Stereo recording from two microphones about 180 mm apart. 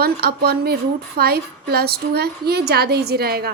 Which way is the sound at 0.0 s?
60° right (ahead or behind).